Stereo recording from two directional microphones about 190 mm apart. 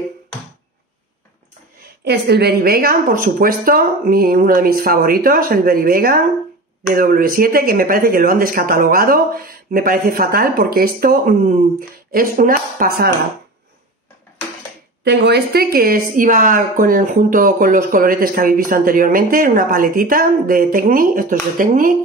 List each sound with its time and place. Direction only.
2.0 s a woman's voice: 60° right (ahead or behind)
15.0 s a woman's voice: 60° right (ahead or behind)